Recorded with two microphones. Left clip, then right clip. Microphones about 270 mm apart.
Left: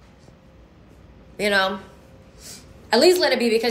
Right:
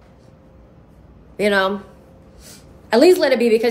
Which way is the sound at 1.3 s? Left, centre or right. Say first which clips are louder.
Right 3 dB; centre.